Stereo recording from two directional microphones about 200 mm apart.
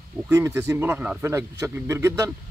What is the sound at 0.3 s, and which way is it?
Speech, 10° right (ahead or behind).